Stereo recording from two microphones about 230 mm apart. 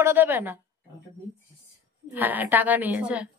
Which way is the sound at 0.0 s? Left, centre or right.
Centre.